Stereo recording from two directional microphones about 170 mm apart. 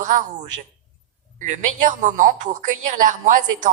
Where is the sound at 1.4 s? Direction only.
45° right (ahead or behind).